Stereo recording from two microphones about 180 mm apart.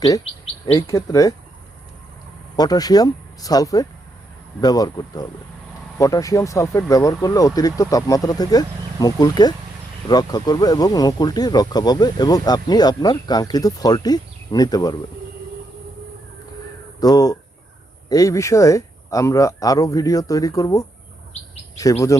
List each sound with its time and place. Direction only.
0.7 s speech: 20° left (ahead or behind)
2.6 s speech: 20° left (ahead or behind)
17.0 s speech: 20° left (ahead or behind)